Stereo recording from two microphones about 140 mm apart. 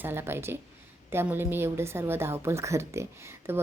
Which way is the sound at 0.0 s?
15° right (ahead or behind).